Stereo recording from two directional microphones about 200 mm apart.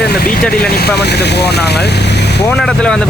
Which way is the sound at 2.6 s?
5° left (ahead or behind).